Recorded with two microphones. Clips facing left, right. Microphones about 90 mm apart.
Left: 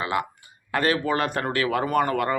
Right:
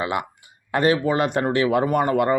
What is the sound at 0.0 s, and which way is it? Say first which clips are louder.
Speech: right 1 dB; 20° right (ahead or behind).